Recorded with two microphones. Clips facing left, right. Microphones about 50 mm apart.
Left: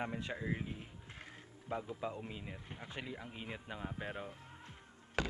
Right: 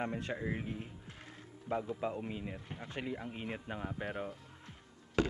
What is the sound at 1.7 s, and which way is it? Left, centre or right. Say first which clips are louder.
Speech: right 5 dB; centre.